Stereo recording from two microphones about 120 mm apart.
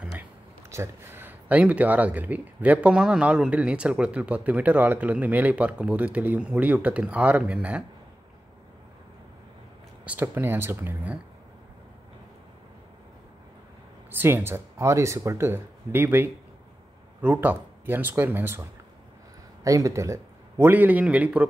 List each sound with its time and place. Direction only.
0.7 s speech: 20° right (ahead or behind)
10.0 s speech: 15° right (ahead or behind)
14.1 s speech: 20° right (ahead or behind)